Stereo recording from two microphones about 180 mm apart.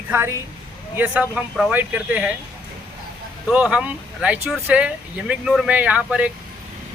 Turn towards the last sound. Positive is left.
turn(degrees=-5)  # may be behind; listen again after turning